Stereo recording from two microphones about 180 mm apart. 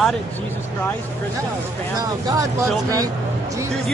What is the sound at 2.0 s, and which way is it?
Speech, 20° right (ahead or behind).